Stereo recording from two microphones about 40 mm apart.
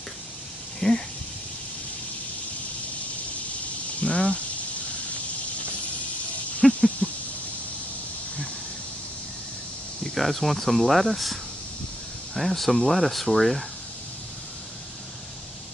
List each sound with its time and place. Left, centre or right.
0.7 s speech: centre
4.0 s cricket: left
6.6 s a sound: centre
7.0 s a sound: left
10.0 s speech: centre
12.4 s speech: centre